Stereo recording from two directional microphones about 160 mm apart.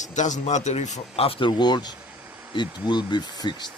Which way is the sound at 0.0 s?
50° left (ahead or behind).